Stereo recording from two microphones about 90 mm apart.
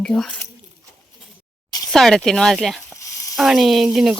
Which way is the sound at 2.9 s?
35° left (ahead or behind).